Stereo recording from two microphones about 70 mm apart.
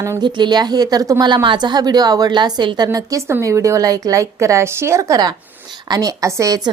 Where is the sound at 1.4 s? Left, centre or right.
Right.